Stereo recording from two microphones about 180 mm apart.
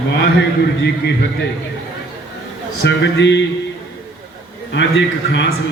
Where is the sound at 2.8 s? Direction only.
75° left (ahead or behind).